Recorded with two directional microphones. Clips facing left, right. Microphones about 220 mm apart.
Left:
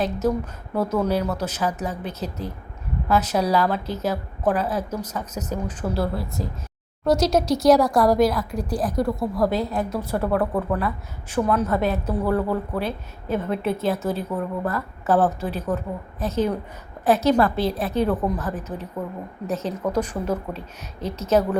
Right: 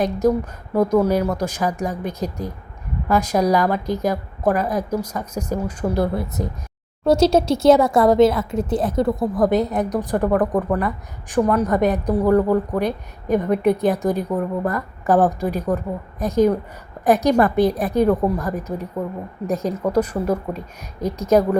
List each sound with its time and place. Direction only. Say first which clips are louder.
0.0 s a woman's voice: right 4 dB; 10° right (ahead or behind)